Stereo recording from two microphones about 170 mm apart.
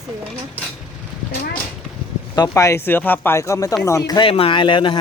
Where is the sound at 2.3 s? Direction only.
20° left (ahead or behind).